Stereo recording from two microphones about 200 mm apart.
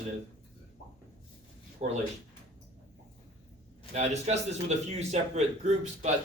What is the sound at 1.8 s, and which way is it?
Speech, 30° right (ahead or behind).